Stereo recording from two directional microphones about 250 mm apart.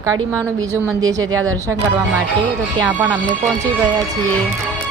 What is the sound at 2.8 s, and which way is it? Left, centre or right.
Speech, centre.